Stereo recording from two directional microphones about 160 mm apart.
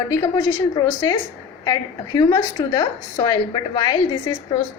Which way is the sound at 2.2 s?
20° left (ahead or behind).